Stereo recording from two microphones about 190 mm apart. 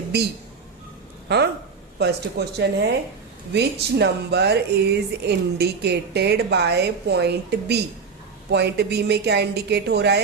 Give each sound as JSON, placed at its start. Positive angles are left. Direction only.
{"t": 2.0, "sound": "speech", "side_deg": -60}